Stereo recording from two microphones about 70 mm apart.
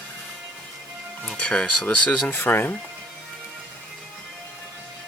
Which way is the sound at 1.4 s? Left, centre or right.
Centre.